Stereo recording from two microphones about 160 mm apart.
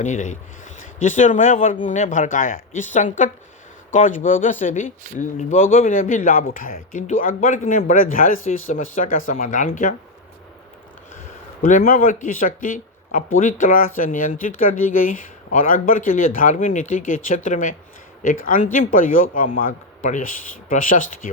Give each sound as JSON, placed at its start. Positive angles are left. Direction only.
{"t": 0.0, "sound": "speech", "side_deg": 50}
{"t": 11.6, "sound": "speech", "side_deg": 60}